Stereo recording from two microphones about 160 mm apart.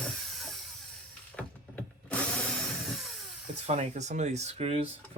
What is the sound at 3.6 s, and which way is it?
Speech, 45° right (ahead or behind).